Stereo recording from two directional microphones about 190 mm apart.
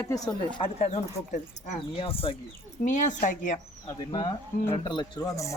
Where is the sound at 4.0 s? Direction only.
25° left (ahead or behind).